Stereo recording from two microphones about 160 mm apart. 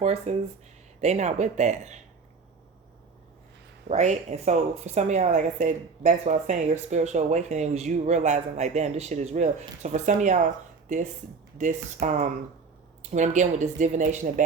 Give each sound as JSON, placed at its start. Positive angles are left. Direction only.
{"t": 0.0, "sound": "a woman's voice", "side_deg": -45}
{"t": 3.8, "sound": "a woman's voice", "side_deg": -45}